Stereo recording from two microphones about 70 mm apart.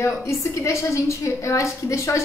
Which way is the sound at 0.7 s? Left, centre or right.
Left.